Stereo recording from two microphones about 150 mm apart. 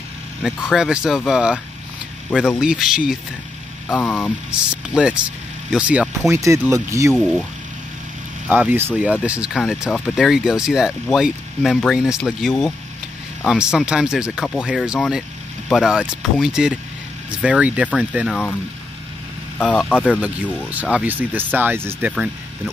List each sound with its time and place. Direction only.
0.4 s speech: 5° right (ahead or behind)
6.4 s speech: 20° right (ahead or behind)
7.2 s speech: centre (ahead or behind)
8.5 s speech: 10° right (ahead or behind)
19.6 s speech: centre (ahead or behind)
20.7 s speech: 10° right (ahead or behind)